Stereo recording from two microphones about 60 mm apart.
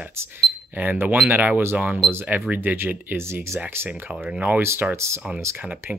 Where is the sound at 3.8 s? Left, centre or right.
Right.